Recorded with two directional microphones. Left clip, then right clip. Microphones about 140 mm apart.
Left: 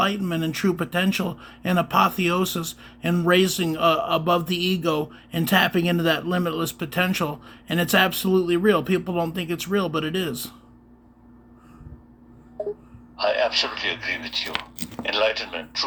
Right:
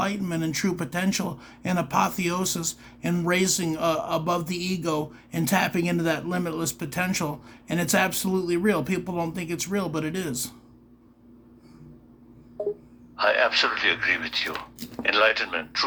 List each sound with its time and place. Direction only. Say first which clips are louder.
0.0 s speech: left 4 dB; centre (ahead or behind)
13.1 s a man's voice: even; 10° left (ahead or behind)